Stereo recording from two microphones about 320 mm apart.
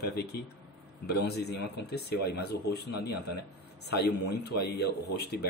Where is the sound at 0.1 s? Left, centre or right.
Left.